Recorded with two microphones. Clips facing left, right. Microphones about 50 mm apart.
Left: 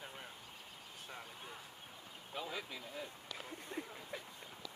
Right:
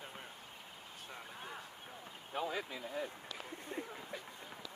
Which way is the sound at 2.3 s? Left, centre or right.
Right.